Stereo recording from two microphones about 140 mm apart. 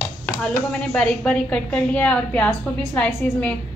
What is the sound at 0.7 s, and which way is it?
A woman's voice, 5° left (ahead or behind).